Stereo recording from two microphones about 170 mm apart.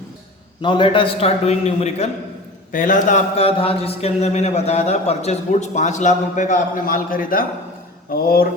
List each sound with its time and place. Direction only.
0.6 s a man's voice: 30° left (ahead or behind)
2.7 s a man's voice: 50° left (ahead or behind)
3.3 s a man's voice: 35° left (ahead or behind); by 8.4 s 60° left (ahead or behind)